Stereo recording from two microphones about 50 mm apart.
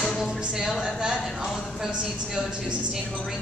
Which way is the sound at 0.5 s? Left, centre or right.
Centre.